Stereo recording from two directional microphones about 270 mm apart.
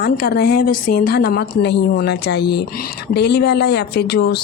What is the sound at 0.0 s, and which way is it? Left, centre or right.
Speech, left.